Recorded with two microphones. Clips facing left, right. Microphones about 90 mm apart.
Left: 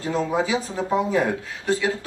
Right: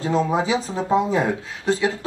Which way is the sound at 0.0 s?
20° right (ahead or behind).